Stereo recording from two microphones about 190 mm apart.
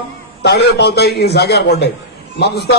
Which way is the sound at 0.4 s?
60° left (ahead or behind).